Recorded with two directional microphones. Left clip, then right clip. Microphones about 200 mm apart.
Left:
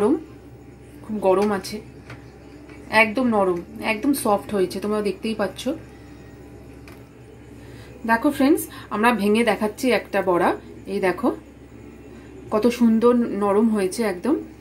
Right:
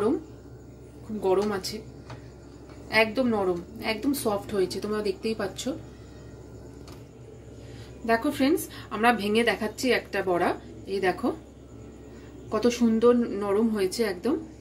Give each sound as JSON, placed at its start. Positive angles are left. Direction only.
{"t": 1.2, "sound": "a woman's voice", "side_deg": 35}
{"t": 2.9, "sound": "a woman's voice", "side_deg": 35}
{"t": 8.1, "sound": "a woman's voice", "side_deg": 40}
{"t": 12.4, "sound": "a woman's voice", "side_deg": 35}